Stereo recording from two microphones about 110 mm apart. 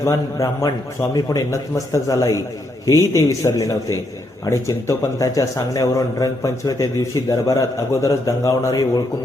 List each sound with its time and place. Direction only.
0.0 s a man's voice: 30° left (ahead or behind)